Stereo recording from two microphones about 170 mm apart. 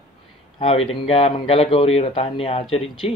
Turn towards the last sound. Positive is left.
turn(degrees=35)  # may be behind; listen again after turning